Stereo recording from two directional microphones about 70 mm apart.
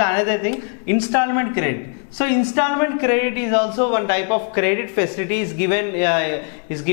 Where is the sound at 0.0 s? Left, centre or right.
Centre.